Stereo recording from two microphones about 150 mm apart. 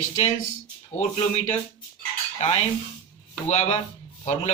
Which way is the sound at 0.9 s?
50° left (ahead or behind).